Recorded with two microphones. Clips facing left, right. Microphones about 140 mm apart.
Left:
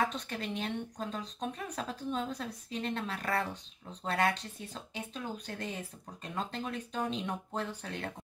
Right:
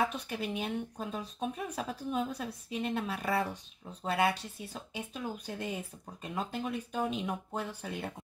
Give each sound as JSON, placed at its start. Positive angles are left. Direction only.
{"t": 0.0, "sound": "speech", "side_deg": -10}